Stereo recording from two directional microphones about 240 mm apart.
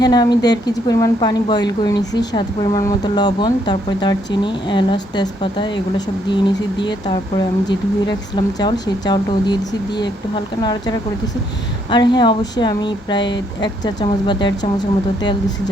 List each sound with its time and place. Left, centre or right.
0.0 s a woman's voice: centre
7.3 s a woman's voice: centre